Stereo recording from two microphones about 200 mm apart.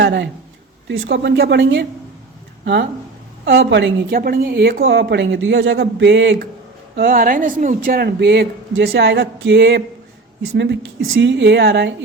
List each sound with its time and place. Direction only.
0.0 s a sound: 65° right (ahead or behind)
0.9 s a woman's voice: 65° right (ahead or behind)
3.4 s a woman's voice: 60° right (ahead or behind)
5.7 s a woman's voice: 60° right (ahead or behind)
6.9 s a woman's voice: 45° right (ahead or behind)